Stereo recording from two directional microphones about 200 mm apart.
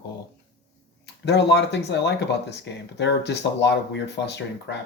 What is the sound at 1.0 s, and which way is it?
Speech, 60° left (ahead or behind).